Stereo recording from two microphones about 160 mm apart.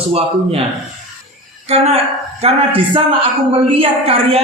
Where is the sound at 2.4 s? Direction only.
35° right (ahead or behind).